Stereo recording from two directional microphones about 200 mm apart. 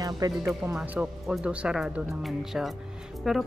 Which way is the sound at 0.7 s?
5° right (ahead or behind).